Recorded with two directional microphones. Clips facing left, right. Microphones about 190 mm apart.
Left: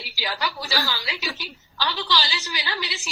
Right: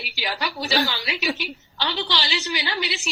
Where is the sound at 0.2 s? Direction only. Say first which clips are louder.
Right 1 dB; 25° right (ahead or behind).